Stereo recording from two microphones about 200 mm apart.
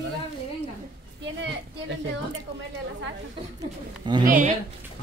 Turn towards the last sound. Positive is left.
turn(degrees=-20)  # may be behind; listen again after turning